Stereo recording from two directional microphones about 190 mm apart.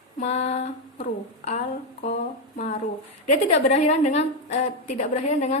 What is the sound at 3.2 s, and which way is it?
A woman's voice, 40° left (ahead or behind).